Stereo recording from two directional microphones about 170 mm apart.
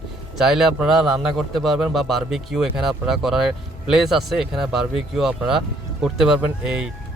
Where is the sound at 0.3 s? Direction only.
5° right (ahead or behind).